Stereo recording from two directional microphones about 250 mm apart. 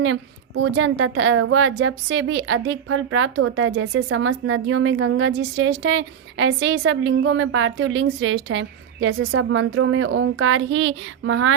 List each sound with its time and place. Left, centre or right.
0.0 s a woman's voice: right